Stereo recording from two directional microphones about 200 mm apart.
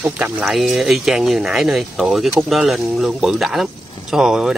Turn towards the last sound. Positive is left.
turn(degrees=0)  # may be behind; listen again after turning